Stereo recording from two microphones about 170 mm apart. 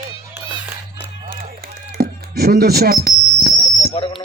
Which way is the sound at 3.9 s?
30° left (ahead or behind).